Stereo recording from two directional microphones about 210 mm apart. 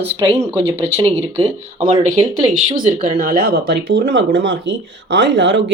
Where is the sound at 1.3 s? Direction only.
25° right (ahead or behind).